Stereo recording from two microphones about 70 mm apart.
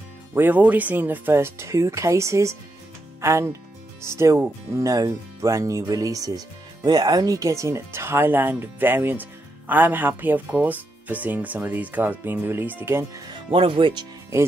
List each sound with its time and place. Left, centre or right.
0.3 s speech: right